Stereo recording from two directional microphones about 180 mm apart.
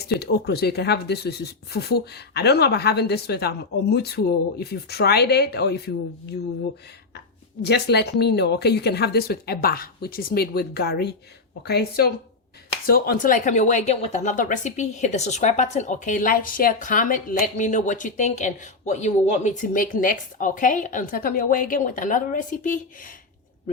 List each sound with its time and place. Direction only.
0.0 s speech: 65° left (ahead or behind)
7.6 s speech: 65° left (ahead or behind); by 23.1 s 50° left (ahead or behind)